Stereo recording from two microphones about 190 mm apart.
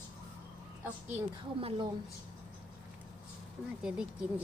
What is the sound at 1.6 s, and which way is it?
Speech, 30° right (ahead or behind).